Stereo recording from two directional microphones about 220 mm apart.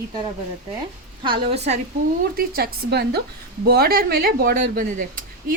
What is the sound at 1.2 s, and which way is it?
Speech, 25° right (ahead or behind).